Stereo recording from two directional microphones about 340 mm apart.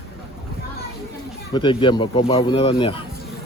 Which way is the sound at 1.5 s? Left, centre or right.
Centre.